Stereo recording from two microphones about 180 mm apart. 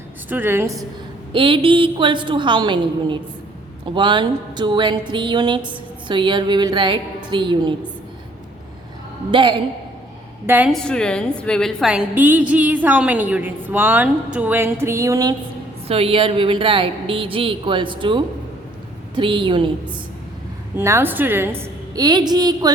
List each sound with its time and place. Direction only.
0.3 s a woman's voice: 10° right (ahead or behind)
1.3 s speech: 30° right (ahead or behind)
9.3 s speech: 25° right (ahead or behind)
10.4 s a woman's voice: 10° right (ahead or behind)
10.7 s a woman's voice: 5° left (ahead or behind); by 15.4 s 20° right (ahead or behind)
15.9 s speech: 30° right (ahead or behind)
20.7 s a woman's voice: 15° right (ahead or behind)